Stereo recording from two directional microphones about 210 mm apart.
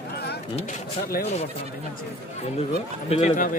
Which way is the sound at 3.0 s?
30° left (ahead or behind).